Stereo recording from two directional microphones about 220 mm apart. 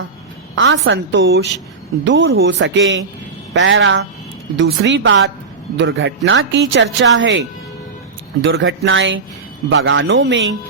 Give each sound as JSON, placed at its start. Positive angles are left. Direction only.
{"t": 0.5, "sound": "a woman's voice", "side_deg": -60}
{"t": 8.4, "sound": "a woman's voice", "side_deg": -55}